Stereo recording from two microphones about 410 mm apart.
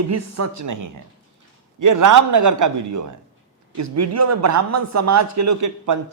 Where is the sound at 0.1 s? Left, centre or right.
Right.